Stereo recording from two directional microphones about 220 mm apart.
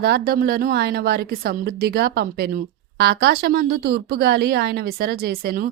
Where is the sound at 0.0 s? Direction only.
45° right (ahead or behind).